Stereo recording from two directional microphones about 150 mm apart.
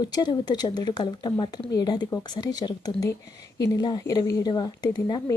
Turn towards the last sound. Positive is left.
turn(degrees=25)  # may be behind; listen again after turning